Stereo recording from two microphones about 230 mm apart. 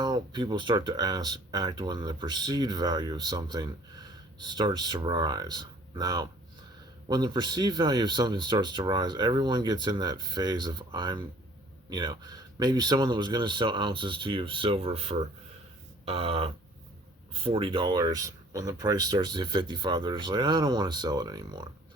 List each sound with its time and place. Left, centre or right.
0.0 s speech: centre